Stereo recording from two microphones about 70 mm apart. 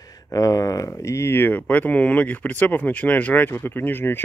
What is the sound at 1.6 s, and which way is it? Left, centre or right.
Speech, left.